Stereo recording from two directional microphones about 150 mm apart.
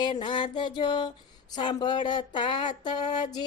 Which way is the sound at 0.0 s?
30° left (ahead or behind).